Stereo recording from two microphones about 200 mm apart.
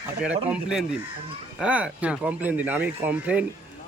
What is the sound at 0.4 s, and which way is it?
Speech, 5° right (ahead or behind).